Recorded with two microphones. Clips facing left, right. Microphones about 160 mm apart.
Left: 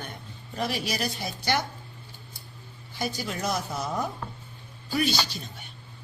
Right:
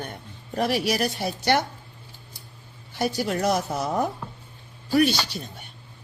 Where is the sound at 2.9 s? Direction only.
65° right (ahead or behind).